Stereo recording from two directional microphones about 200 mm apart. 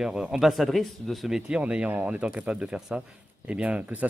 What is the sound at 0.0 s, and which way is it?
Speech, 5° right (ahead or behind).